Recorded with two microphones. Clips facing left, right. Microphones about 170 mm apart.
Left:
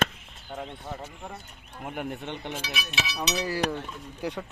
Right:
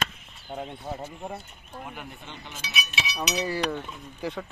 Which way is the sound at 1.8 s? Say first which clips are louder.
Left 11 dB; 60° left (ahead or behind).